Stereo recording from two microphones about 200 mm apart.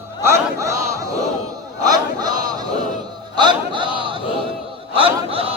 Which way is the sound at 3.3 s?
25° right (ahead or behind).